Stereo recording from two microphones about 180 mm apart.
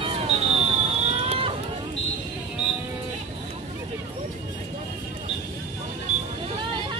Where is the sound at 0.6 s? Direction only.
35° right (ahead or behind).